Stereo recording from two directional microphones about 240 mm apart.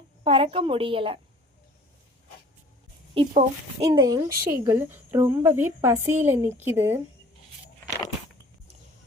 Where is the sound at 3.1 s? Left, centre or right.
Right.